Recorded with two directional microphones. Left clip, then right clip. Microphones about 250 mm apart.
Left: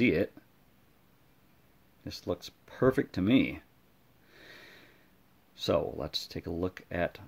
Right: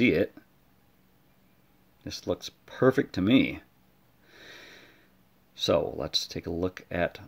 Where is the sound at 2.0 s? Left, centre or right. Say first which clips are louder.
Right 4 dB; centre.